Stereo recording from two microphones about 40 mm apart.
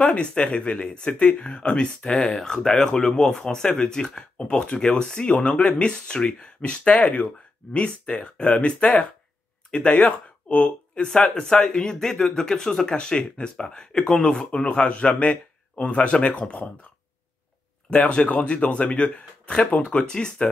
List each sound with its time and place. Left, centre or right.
0.0 s speech: left
4.4 s speech: left
11.2 s speech: centre; by 16.6 s left
17.8 s speech: left